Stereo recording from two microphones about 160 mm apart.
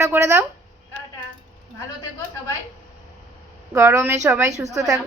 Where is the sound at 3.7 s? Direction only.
15° right (ahead or behind).